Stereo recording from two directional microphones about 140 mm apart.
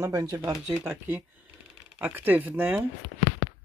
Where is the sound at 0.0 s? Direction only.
25° right (ahead or behind).